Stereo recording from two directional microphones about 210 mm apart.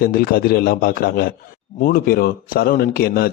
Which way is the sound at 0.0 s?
45° left (ahead or behind).